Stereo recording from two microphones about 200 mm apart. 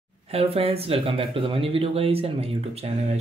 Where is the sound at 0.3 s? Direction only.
30° right (ahead or behind).